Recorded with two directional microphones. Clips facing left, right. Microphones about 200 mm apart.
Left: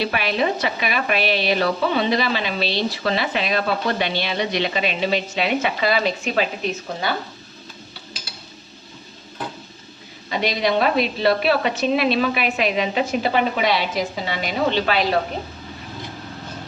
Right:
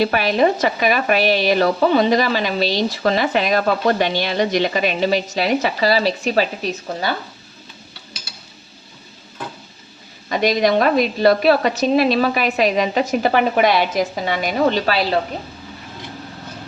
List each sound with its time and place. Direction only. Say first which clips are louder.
0.0 s speech: right 5 dB; 40° right (ahead or behind)
10.2 s speech: right 5 dB; 45° right (ahead or behind)